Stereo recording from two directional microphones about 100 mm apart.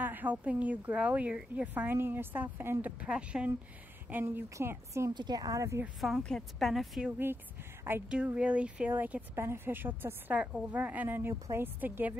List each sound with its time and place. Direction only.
0.0 s speech: 15° right (ahead or behind)
5.1 s a woman's voice: 45° right (ahead or behind)
5.9 s a woman's voice: centre (ahead or behind)
7.1 s speech: 20° right (ahead or behind)